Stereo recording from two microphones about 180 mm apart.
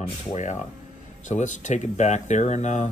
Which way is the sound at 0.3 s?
40° left (ahead or behind).